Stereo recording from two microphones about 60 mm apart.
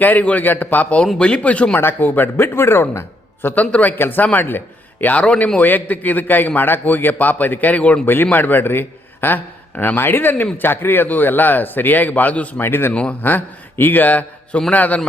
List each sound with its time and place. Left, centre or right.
0.0 s a man's voice: left
1.8 s a man's voice: left
8.0 s a man's voice: left
12.6 s a man's voice: left
12.9 s a man's voice: centre
13.2 s a man's voice: left